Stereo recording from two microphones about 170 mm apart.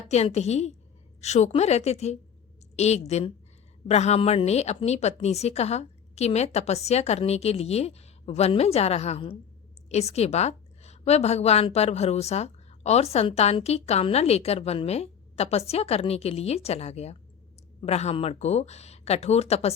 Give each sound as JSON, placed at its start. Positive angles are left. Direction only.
{"t": 0.1, "sound": "a woman's voice", "side_deg": 40}